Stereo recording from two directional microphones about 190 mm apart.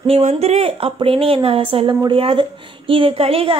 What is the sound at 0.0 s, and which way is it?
A woman's voice, 30° right (ahead or behind).